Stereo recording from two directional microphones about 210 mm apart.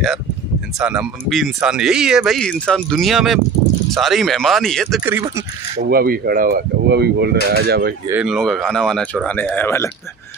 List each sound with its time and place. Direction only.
0.7 s speech: 5° right (ahead or behind)
5.0 s speech: 10° right (ahead or behind)
5.9 s speech: 45° right (ahead or behind)
8.1 s speech: 5° right (ahead or behind)